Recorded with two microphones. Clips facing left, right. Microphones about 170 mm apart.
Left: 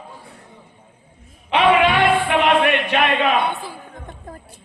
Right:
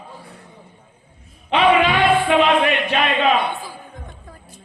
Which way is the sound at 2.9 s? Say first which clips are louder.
Even; 60° left (ahead or behind).